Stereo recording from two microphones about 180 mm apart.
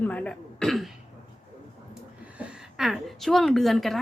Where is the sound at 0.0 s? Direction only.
10° left (ahead or behind).